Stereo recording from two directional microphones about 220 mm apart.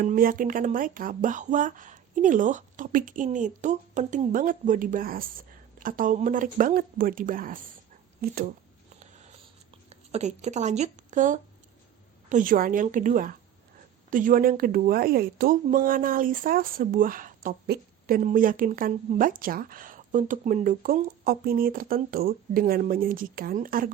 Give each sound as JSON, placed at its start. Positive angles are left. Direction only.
{"t": 0.0, "sound": "speech", "side_deg": -40}
{"t": 9.9, "sound": "speech", "side_deg": -30}